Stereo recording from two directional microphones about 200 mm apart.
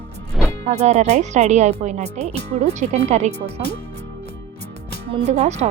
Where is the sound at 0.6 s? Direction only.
35° right (ahead or behind).